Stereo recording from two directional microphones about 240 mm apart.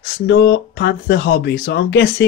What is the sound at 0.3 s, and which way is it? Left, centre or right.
Speech, left.